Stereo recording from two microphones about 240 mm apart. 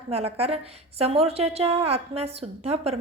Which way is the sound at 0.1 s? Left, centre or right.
Right.